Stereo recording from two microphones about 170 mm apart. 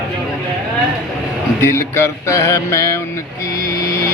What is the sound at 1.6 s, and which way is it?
Music, 15° left (ahead or behind).